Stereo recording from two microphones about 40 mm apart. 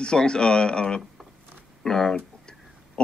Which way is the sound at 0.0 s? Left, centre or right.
Left.